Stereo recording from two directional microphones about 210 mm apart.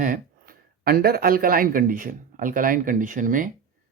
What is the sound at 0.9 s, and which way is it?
Speech, 45° right (ahead or behind).